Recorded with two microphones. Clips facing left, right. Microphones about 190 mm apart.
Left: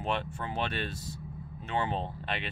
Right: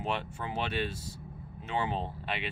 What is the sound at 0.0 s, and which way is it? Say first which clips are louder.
Speech: left 1 dB; 10° right (ahead or behind).